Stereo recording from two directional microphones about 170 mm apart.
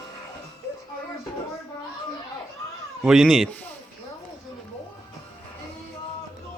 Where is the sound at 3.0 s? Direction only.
Centre (ahead or behind).